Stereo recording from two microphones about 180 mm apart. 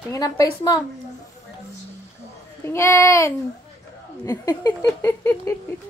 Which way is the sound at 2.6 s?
15° left (ahead or behind).